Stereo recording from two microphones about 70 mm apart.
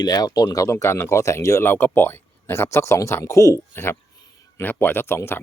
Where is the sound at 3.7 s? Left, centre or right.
Left.